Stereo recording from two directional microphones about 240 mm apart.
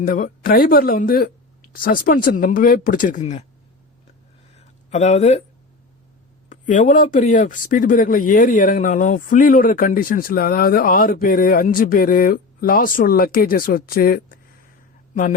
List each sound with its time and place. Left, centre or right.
0.0 s speech: left
4.5 s a sound: left
6.5 s speech: left